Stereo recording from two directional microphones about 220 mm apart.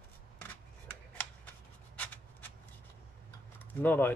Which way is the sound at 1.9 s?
10° left (ahead or behind).